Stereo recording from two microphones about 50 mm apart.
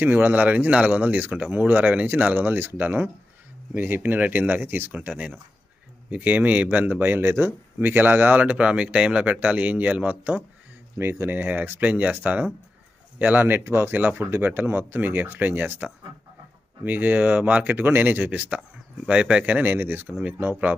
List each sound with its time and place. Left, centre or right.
0.0 s speech: right
4.9 s speech: right
11.0 s speech: right
13.9 s speech: right
14.2 s speech: right
19.0 s speech: right